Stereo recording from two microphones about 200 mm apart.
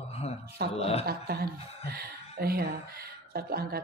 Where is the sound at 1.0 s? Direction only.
50° right (ahead or behind).